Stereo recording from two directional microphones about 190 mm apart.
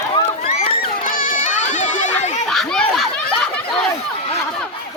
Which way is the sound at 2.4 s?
Centre (ahead or behind).